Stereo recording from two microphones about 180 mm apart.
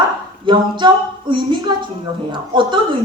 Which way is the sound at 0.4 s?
25° right (ahead or behind).